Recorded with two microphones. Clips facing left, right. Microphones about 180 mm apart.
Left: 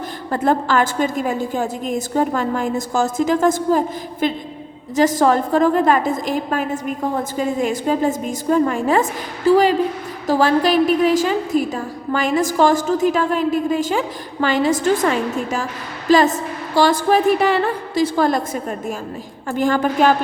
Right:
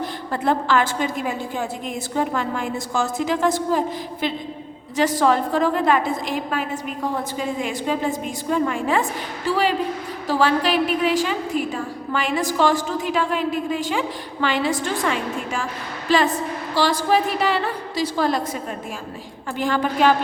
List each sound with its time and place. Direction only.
0.3 s a woman's voice: 45° left (ahead or behind)